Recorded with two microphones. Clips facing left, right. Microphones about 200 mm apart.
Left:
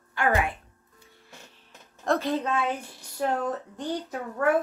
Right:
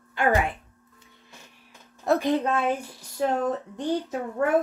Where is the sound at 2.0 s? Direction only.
10° right (ahead or behind).